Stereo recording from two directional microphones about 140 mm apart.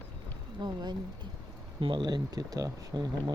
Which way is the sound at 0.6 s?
30° right (ahead or behind).